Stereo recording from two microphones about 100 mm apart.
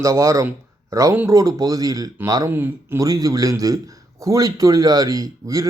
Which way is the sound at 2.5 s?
20° right (ahead or behind).